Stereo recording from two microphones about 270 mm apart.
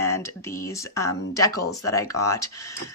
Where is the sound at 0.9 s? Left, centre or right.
Centre.